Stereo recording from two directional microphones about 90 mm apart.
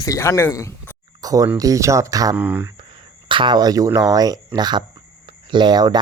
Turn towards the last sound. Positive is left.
turn(degrees=-50)  # may be behind; listen again after turning